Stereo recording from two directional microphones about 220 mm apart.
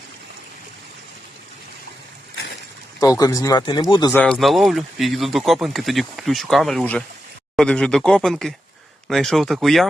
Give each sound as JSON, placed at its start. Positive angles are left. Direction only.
{"t": 3.0, "sound": "speech", "side_deg": 15}
{"t": 4.1, "sound": "speech", "side_deg": 5}